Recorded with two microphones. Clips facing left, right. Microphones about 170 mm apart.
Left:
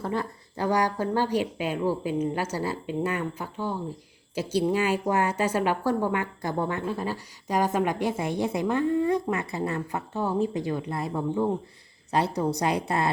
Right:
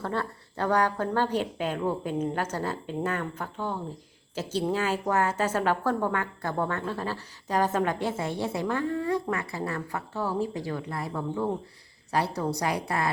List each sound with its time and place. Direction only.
0.0 s a woman's voice: 10° left (ahead or behind)